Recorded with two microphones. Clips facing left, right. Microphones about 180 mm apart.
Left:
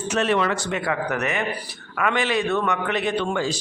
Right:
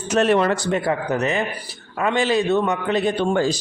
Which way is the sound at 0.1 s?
40° right (ahead or behind).